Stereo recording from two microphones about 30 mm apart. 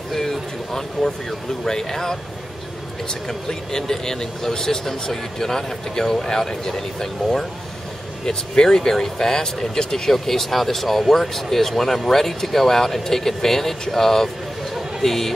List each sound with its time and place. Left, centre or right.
0.1 s a sound: centre
1.6 s speech: centre
3.3 s speech: centre